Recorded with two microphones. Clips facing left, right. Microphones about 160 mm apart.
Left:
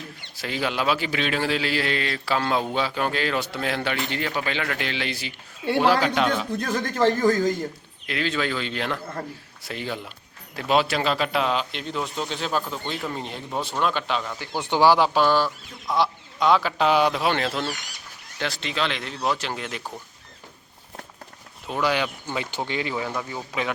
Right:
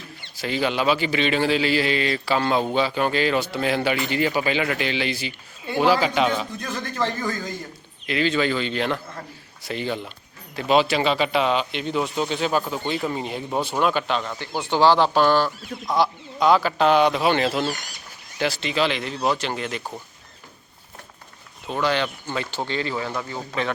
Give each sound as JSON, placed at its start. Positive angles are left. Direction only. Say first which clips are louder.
{"t": 0.3, "sound": "speech", "louder": "right 3 dB", "side_deg": 0}
{"t": 6.6, "sound": "speech", "louder": "left 4 dB", "side_deg": 45}
{"t": 8.0, "sound": "speech", "louder": "right 4 dB", "side_deg": 0}
{"t": 14.7, "sound": "speech", "louder": "right 1 dB", "side_deg": 10}
{"t": 21.7, "sound": "speech", "louder": "right 1 dB", "side_deg": 10}